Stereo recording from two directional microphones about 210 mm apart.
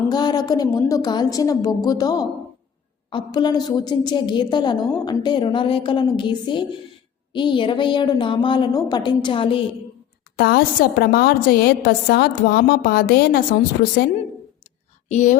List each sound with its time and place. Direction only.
0.1 s a woman's voice: 20° left (ahead or behind)
10.3 s a woman's voice: 45° left (ahead or behind)
15.1 s speech: 35° left (ahead or behind)